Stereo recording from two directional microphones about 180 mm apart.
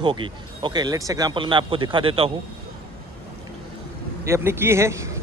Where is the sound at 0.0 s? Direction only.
25° right (ahead or behind).